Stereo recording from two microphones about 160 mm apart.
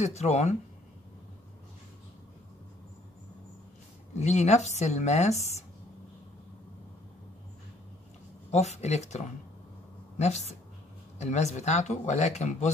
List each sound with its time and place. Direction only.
0.0 s speech: 45° left (ahead or behind)
4.1 s speech: 45° left (ahead or behind)
8.5 s a woman's voice: 45° left (ahead or behind)